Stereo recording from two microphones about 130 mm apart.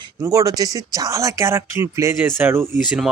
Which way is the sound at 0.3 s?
25° right (ahead or behind).